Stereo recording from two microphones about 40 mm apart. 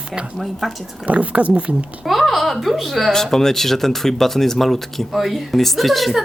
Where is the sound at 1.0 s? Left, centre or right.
Right.